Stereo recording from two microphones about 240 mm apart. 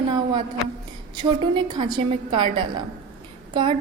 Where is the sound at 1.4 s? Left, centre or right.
Centre.